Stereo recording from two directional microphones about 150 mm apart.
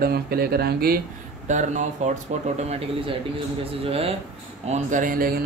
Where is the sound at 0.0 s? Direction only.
90° right.